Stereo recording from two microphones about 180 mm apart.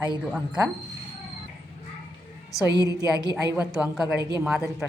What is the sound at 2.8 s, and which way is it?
Speech, 20° right (ahead or behind).